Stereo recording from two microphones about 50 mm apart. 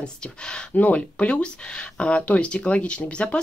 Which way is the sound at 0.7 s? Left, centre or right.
Left.